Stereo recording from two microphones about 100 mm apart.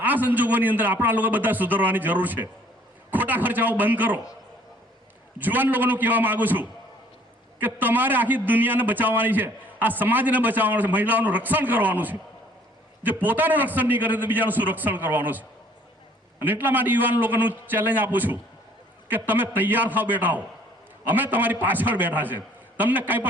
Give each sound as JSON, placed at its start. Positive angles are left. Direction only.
{"t": 0.0, "sound": "a man's voice", "side_deg": -15}
{"t": 5.4, "sound": "a man's voice", "side_deg": -20}
{"t": 13.2, "sound": "a man's voice", "side_deg": -20}